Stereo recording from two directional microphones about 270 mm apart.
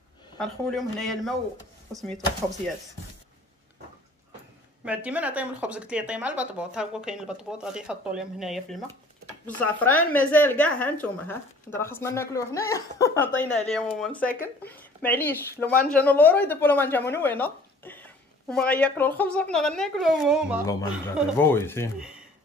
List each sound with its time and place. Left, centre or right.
0.4 s speech: centre
4.8 s speech: centre
21.4 s speech: centre